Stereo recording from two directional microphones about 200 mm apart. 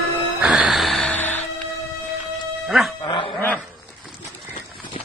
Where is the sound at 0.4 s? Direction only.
5° right (ahead or behind).